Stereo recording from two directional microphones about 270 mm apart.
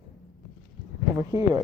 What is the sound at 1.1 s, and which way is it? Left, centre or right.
Speech, centre.